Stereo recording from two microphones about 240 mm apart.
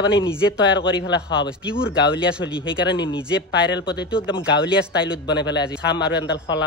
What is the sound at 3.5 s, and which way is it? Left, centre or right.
Speech, left.